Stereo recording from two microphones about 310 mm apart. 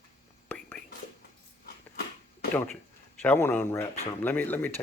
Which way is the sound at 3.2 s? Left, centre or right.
Centre.